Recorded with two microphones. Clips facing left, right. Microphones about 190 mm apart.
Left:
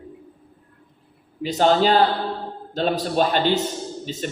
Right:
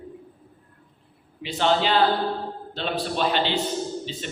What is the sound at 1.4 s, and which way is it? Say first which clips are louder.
A man's voice: left 5 dB; 40° left (ahead or behind).